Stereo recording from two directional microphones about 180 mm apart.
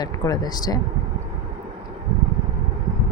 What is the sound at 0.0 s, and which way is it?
Speech, 20° left (ahead or behind).